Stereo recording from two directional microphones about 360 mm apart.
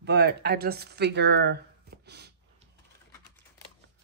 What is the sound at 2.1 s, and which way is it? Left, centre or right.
Gasp, right.